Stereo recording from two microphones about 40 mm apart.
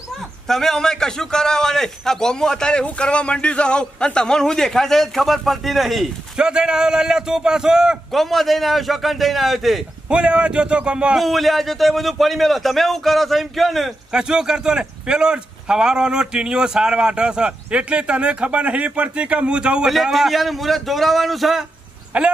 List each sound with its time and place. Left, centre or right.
0.5 s a man's voice: centre
6.3 s a man's voice: centre
8.1 s a man's voice: centre
10.0 s a man's voice: right
11.1 s a man's voice: centre
14.1 s a man's voice: centre
19.9 s a man's voice: centre
22.1 s speech: right